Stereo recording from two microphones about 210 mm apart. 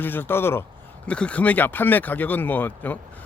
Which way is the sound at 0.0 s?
10° left (ahead or behind).